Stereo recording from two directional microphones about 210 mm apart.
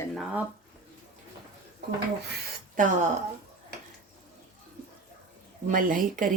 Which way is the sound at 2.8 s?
35° right (ahead or behind).